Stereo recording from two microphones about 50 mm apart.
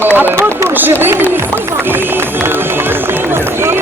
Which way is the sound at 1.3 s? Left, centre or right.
Right.